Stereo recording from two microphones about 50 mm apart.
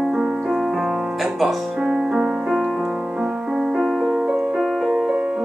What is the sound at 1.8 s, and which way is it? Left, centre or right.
Music, centre.